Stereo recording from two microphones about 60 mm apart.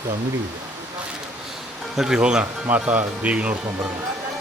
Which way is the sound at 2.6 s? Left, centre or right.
Right.